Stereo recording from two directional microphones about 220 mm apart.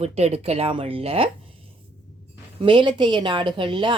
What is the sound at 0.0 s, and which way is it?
A woman's voice, 30° right (ahead or behind).